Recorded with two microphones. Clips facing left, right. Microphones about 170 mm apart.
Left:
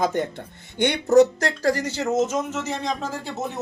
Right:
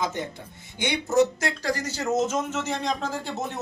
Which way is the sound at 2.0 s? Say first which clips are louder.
Left 2 dB; 5° left (ahead or behind).